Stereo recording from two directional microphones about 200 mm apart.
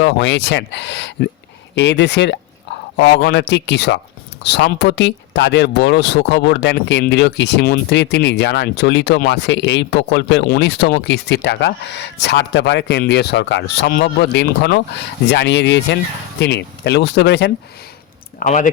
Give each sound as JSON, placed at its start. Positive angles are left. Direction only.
{"t": 0.0, "sound": "speech", "side_deg": 60}
{"t": 18.3, "sound": "speech", "side_deg": 40}